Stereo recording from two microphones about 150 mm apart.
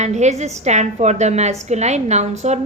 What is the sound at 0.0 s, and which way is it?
A woman's voice, 50° right (ahead or behind).